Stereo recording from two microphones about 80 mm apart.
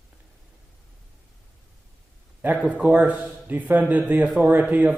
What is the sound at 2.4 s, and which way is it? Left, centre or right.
A man's voice, centre.